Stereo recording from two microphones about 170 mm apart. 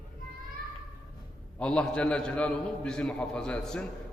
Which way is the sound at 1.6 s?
5° left (ahead or behind).